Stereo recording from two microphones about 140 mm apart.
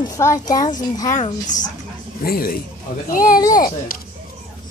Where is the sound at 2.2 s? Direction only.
90° left.